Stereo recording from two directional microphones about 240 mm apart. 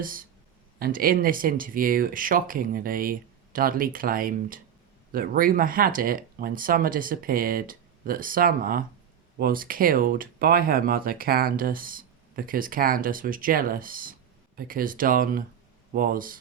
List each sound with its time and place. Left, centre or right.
0.0 s speech: right